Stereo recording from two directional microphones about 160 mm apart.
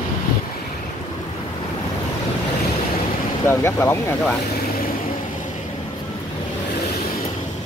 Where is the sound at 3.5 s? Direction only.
15° left (ahead or behind).